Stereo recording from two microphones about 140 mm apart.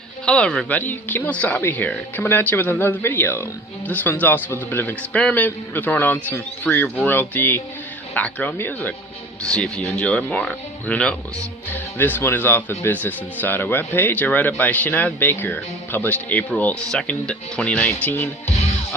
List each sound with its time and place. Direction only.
0.3 s speech: 5° left (ahead or behind)